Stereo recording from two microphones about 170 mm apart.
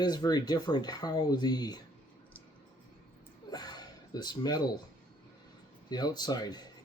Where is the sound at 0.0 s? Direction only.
25° left (ahead or behind).